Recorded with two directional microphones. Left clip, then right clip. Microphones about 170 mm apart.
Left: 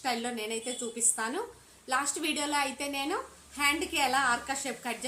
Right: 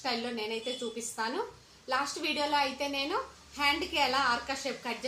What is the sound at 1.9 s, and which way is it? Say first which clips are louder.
A woman's voice: left 1 dB; 5° left (ahead or behind).